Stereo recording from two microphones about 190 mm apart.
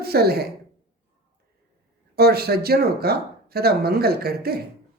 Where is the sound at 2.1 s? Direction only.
55° right (ahead or behind).